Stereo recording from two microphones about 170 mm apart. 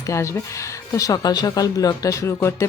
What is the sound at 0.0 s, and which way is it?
A woman's voice, 15° left (ahead or behind).